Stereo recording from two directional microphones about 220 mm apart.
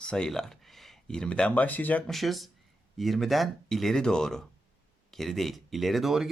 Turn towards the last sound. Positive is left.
turn(degrees=0)  # may be behind; listen again after turning